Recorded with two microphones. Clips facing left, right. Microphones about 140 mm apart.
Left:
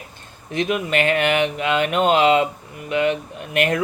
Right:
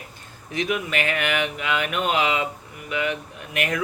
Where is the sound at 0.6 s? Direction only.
30° left (ahead or behind).